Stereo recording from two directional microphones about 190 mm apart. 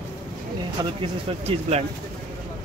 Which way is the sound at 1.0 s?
30° right (ahead or behind).